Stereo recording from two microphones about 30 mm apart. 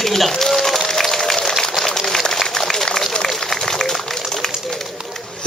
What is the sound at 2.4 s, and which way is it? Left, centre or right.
Run, centre.